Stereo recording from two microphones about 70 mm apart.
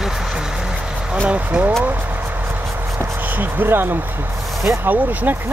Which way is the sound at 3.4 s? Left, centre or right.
Right.